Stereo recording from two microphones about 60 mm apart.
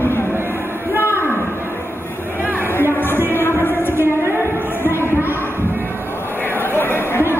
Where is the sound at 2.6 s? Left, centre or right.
Left.